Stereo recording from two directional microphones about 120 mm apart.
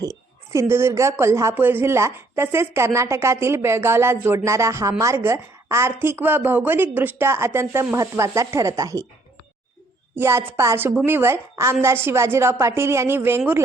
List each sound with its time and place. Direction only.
0.0 s speech: 25° right (ahead or behind)
10.2 s speech: 20° right (ahead or behind)